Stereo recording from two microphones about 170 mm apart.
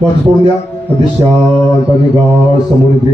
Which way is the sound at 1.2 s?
30° right (ahead or behind).